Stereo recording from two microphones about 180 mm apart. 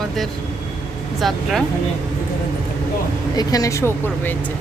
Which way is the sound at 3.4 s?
20° left (ahead or behind).